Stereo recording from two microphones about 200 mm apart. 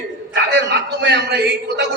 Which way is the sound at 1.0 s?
60° right (ahead or behind).